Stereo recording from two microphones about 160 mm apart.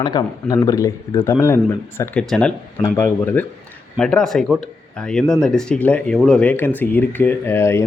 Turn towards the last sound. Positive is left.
turn(degrees=15)  # may be behind; listen again after turning